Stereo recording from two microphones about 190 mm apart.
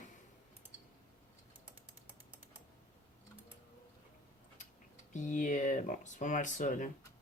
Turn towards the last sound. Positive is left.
turn(degrees=40)  # may be behind; listen again after turning